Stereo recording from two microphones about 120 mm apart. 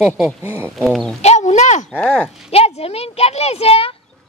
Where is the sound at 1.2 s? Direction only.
70° left (ahead or behind).